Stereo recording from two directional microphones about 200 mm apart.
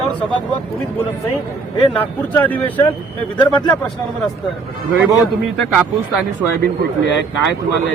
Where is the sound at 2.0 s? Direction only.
10° left (ahead or behind).